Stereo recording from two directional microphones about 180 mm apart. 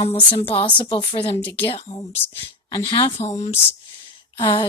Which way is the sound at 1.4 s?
10° left (ahead or behind).